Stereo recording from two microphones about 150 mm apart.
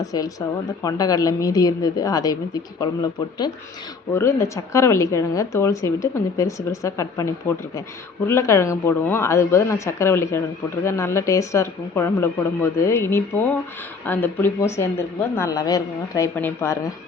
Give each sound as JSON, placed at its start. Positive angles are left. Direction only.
{"t": 0.0, "sound": "a woman's voice", "side_deg": 25}